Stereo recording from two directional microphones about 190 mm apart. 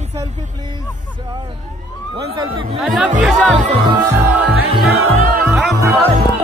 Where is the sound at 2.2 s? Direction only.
20° right (ahead or behind).